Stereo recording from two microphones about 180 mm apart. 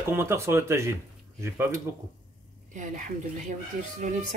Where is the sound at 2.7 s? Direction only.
45° right (ahead or behind).